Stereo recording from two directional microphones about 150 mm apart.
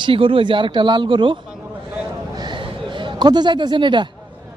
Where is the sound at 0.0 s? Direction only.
35° right (ahead or behind).